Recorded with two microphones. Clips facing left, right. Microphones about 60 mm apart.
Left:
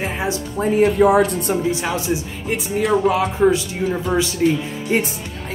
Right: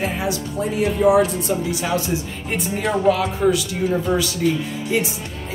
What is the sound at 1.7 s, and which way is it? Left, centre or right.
Speech, left.